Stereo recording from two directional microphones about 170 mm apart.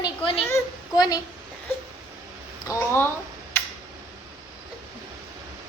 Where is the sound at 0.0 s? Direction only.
30° left (ahead or behind).